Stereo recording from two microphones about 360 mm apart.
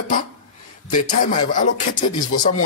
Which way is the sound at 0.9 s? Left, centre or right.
Left.